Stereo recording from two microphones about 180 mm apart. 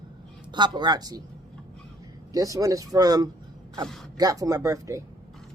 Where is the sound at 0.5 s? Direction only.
25° right (ahead or behind).